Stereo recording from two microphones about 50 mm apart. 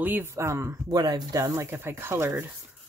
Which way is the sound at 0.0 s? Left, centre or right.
Right.